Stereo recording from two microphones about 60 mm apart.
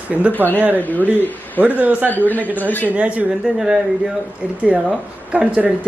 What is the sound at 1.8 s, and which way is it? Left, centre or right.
Speech, right.